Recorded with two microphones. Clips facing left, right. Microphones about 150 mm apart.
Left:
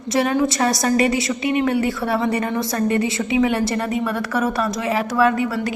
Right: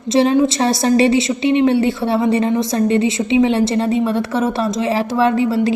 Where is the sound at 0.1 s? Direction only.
25° right (ahead or behind).